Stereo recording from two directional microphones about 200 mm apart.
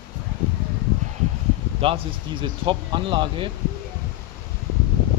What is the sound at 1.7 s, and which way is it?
Speech, 25° right (ahead or behind).